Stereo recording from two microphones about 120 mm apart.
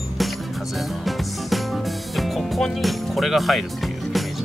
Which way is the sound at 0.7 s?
Centre (ahead or behind).